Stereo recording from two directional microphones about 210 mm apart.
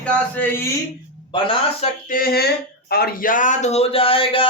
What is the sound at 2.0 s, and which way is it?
A man's voice, 45° left (ahead or behind).